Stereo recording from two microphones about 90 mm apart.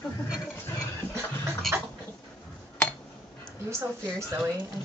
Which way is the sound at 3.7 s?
30° right (ahead or behind).